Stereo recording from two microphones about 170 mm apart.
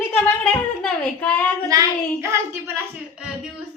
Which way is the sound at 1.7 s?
15° right (ahead or behind).